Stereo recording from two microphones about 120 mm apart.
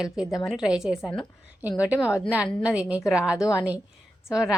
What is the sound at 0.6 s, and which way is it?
A woman's voice, 5° right (ahead or behind).